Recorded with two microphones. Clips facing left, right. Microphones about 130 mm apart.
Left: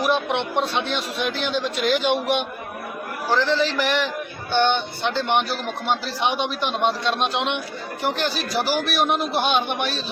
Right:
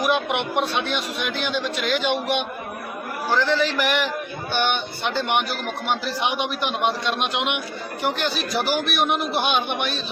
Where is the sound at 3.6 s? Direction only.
30° left (ahead or behind).